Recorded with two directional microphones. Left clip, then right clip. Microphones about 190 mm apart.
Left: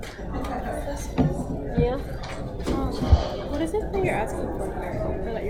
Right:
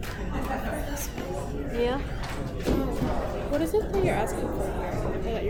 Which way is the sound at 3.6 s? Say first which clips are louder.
Left 1 dB; centre (ahead or behind).